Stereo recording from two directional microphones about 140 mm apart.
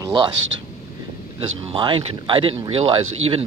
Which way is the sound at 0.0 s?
30° right (ahead or behind).